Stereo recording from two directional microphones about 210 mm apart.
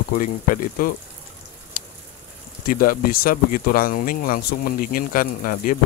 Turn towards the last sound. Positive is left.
turn(degrees=40)  # may be behind; listen again after turning